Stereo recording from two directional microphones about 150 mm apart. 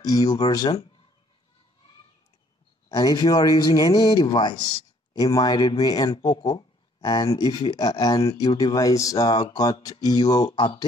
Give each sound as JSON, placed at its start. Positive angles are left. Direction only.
{"t": 0.0, "sound": "speech", "side_deg": 25}
{"t": 2.9, "sound": "speech", "side_deg": 25}